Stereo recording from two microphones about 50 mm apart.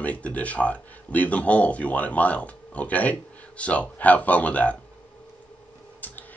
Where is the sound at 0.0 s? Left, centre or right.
Left.